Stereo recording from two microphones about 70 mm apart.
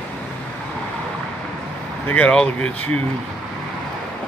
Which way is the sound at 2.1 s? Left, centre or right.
Centre.